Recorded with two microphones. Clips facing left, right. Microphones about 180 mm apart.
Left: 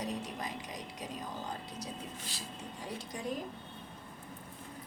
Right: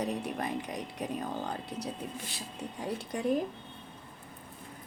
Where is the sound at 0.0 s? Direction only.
60° right (ahead or behind).